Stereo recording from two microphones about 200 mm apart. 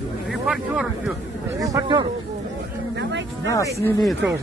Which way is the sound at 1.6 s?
20° right (ahead or behind).